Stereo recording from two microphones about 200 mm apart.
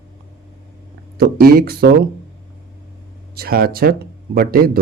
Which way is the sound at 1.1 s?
50° right (ahead or behind).